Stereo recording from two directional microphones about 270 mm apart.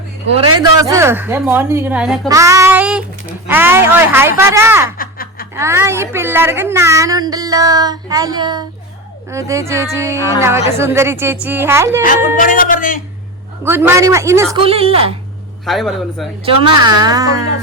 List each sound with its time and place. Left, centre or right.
0.6 s a woman's voice: centre
4.9 s snicker: left
5.5 s a woman's voice: centre
12.0 s speech: left
13.7 s a woman's voice: centre
15.6 s a man's voice: centre
16.5 s a woman's voice: centre